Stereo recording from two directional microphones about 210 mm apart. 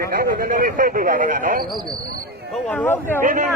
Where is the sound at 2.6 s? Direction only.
10° left (ahead or behind).